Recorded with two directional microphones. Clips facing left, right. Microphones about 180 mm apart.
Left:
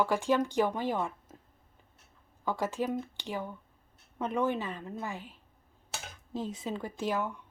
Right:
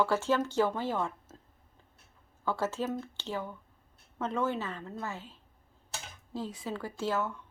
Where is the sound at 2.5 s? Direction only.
15° left (ahead or behind).